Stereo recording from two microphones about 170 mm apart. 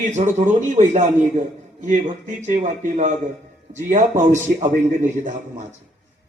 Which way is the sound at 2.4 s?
45° right (ahead or behind).